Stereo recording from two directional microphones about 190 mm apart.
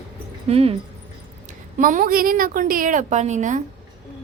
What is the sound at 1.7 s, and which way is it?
A woman's voice, 45° right (ahead or behind).